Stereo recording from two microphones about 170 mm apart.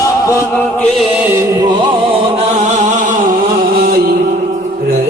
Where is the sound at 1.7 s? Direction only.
30° right (ahead or behind); by 3.3 s 50° right (ahead or behind).